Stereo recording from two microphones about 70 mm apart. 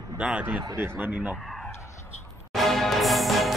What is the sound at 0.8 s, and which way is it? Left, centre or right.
Speech, right.